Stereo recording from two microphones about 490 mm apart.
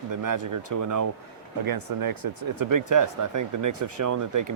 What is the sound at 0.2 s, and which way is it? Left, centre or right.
Speech, right.